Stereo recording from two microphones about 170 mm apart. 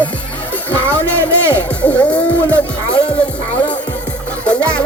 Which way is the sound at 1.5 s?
10° left (ahead or behind).